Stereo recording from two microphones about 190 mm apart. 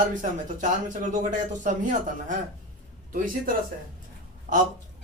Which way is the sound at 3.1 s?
45° right (ahead or behind).